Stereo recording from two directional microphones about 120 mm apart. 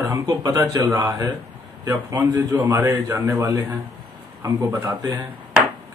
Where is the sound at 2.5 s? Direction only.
20° right (ahead or behind).